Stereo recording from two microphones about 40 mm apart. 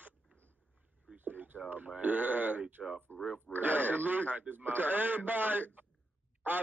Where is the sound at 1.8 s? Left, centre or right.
Right.